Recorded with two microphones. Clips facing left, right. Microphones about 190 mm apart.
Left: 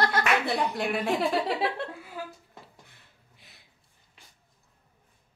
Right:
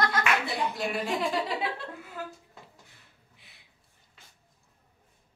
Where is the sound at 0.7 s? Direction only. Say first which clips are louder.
Left 3 dB; 60° left (ahead or behind).